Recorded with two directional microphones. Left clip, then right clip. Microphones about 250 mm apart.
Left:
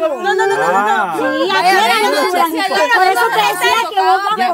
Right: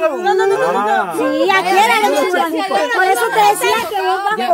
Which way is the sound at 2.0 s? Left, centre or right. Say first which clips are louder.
Left 1 dB; left.